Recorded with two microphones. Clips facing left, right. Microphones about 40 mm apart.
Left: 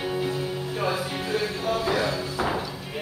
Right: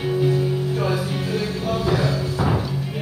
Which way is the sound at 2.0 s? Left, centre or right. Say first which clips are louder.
Right 4 dB; left.